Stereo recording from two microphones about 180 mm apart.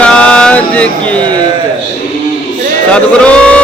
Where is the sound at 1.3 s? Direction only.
25° right (ahead or behind).